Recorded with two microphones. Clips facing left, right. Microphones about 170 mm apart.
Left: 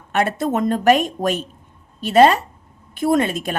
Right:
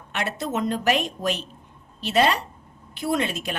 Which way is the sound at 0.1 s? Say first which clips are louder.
Left 8 dB; 50° left (ahead or behind).